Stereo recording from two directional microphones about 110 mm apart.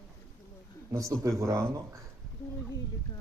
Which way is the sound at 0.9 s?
30° right (ahead or behind).